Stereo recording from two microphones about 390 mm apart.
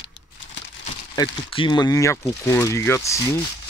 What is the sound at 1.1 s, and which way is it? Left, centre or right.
Speech, centre.